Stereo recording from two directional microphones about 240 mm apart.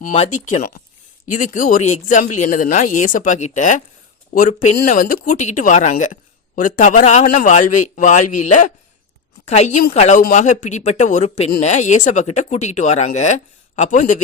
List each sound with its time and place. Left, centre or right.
0.0 s speech: left